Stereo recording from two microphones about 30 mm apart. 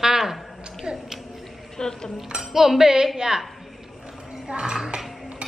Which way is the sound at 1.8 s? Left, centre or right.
Left.